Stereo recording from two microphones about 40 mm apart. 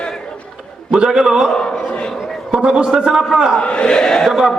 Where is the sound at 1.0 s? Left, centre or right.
Centre.